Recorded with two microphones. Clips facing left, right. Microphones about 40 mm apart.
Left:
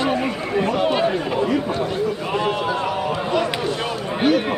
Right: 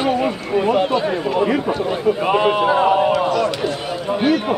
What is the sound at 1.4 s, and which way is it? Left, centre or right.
A man's voice, right.